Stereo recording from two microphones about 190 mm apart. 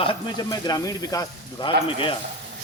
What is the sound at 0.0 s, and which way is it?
Speech, 25° left (ahead or behind).